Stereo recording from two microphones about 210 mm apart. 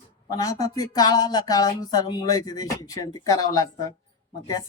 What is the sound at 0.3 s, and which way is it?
Speech, 15° left (ahead or behind).